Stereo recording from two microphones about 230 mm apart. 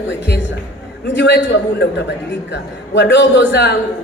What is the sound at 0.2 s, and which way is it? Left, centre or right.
A man's voice, left.